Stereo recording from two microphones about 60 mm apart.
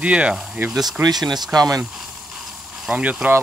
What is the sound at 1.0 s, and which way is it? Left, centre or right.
Speech, right.